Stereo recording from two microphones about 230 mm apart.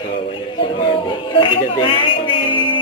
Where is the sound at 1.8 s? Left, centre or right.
Left.